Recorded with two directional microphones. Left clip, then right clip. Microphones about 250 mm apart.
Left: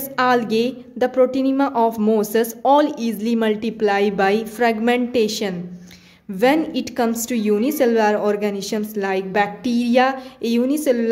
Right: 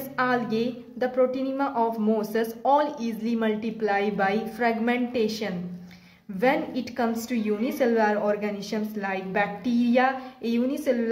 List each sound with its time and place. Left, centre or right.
0.1 s a woman's voice: left